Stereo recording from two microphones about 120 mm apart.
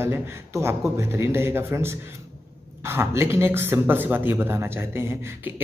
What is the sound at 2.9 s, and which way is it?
Speech, 20° right (ahead or behind).